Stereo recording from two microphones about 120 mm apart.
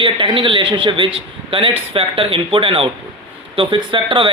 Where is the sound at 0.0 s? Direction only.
45° right (ahead or behind).